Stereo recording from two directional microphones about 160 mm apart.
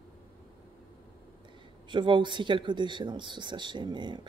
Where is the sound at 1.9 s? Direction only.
30° right (ahead or behind).